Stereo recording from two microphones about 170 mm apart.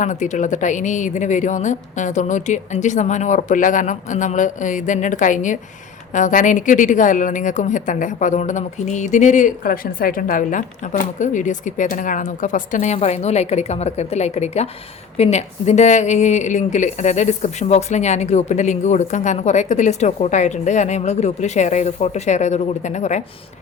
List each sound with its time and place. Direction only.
0.0 s a woman's voice: 45° left (ahead or behind)